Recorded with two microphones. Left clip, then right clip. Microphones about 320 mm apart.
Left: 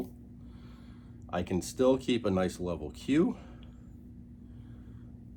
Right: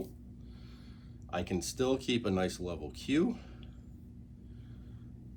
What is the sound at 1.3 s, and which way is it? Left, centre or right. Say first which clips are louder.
Speech: left 2 dB; left.